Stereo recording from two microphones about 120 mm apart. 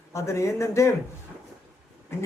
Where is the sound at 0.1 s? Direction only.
25° left (ahead or behind).